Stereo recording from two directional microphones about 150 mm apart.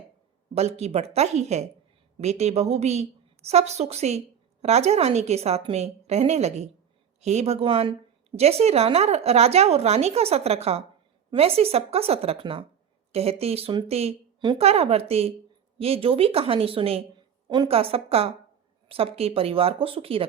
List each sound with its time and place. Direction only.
0.5 s a woman's voice: 45° right (ahead or behind)